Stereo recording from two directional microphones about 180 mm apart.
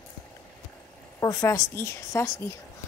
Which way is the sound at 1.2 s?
15° left (ahead or behind).